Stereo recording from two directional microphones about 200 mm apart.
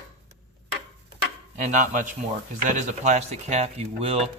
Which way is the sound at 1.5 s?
40° right (ahead or behind).